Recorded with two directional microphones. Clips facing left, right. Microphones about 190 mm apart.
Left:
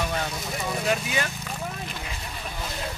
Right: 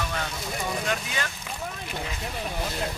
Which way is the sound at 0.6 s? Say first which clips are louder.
Left 3 dB; 10° left (ahead or behind).